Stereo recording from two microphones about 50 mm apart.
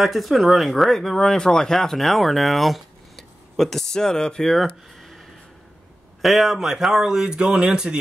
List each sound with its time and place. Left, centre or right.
0.0 s speech: centre
4.6 s a sound: centre
6.2 s speech: centre